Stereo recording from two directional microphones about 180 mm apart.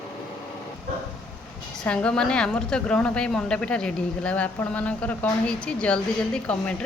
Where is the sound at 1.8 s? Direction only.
5° left (ahead or behind).